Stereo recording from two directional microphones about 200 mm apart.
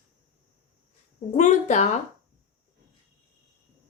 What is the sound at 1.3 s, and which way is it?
Speech, 35° left (ahead or behind).